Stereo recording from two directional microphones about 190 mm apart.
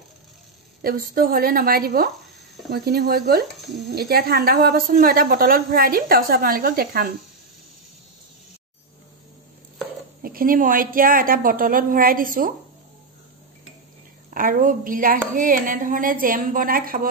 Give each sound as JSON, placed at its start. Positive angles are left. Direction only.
{"t": 0.8, "sound": "a woman's voice", "side_deg": -50}
{"t": 10.2, "sound": "a woman's voice", "side_deg": -50}
{"t": 14.3, "sound": "a woman's voice", "side_deg": -50}